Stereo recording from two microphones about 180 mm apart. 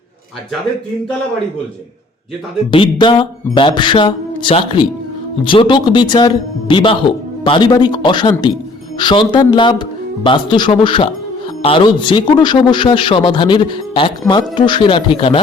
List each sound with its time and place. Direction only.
2.7 s a man's voice: 30° left (ahead or behind)